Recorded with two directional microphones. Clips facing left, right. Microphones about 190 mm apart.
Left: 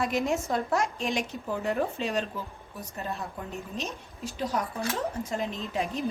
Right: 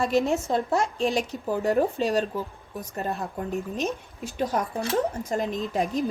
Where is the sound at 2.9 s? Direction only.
55° right (ahead or behind).